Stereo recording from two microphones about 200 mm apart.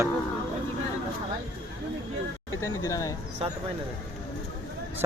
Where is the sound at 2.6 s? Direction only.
15° left (ahead or behind).